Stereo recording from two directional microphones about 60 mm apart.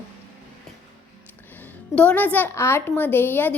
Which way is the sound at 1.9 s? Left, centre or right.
Left.